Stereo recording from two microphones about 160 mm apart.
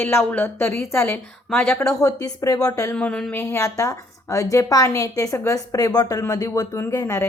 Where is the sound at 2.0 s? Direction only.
20° left (ahead or behind).